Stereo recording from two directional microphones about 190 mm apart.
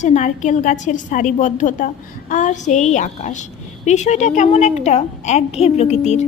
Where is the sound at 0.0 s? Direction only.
40° left (ahead or behind).